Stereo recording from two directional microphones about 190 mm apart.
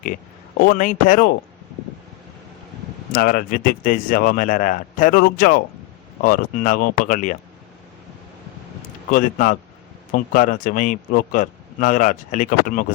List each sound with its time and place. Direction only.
0.6 s speech: 45° left (ahead or behind)
3.1 s speech: 50° left (ahead or behind)
9.1 s speech: 45° left (ahead or behind)